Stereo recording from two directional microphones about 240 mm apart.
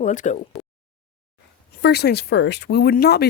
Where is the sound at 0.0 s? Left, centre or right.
Left.